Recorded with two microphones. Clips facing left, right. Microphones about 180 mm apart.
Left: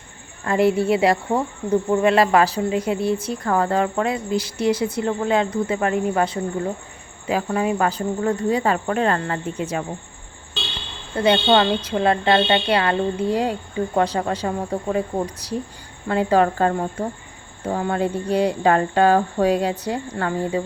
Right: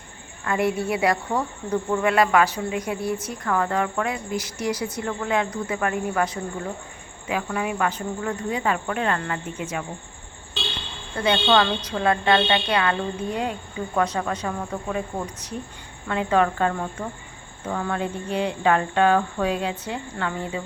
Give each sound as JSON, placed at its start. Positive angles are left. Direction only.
{"t": 0.4, "sound": "a woman's voice", "side_deg": 30}
{"t": 10.6, "sound": "vehicle", "side_deg": 0}
{"t": 11.1, "sound": "a woman's voice", "side_deg": 30}